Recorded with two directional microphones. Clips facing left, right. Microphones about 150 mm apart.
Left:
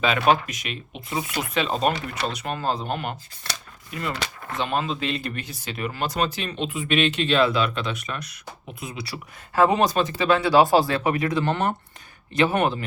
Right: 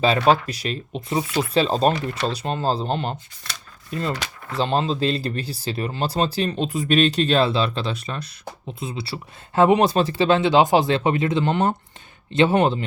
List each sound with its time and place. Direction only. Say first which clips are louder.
0.0 s speech: right 3 dB; 35° right (ahead or behind)
4.5 s speech: right 4 dB; 30° right (ahead or behind)